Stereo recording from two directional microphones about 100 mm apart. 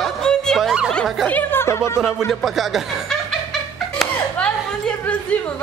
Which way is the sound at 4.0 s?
Centre (ahead or behind).